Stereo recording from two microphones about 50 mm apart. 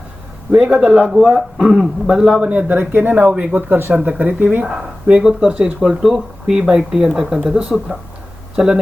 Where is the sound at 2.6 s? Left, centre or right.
Right.